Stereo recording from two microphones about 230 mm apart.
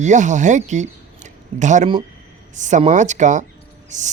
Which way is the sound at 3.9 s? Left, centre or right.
Right.